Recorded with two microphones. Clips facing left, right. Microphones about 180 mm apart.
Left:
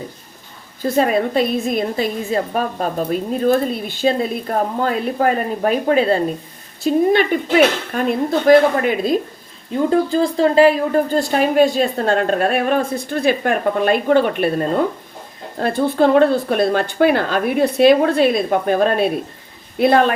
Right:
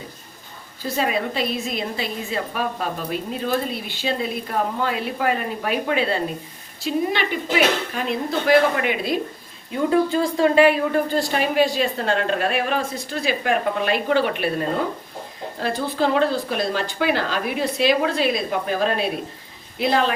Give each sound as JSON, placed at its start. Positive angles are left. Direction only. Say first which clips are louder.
{"t": 0.9, "sound": "speech", "louder": "left 7 dB", "side_deg": 50}
{"t": 15.5, "sound": "speech", "louder": "left 7 dB", "side_deg": 50}